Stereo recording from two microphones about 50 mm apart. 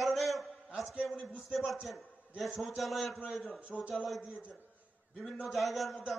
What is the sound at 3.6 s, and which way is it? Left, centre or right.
Speech, right.